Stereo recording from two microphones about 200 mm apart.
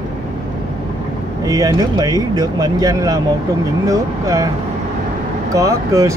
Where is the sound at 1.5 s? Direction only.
15° right (ahead or behind).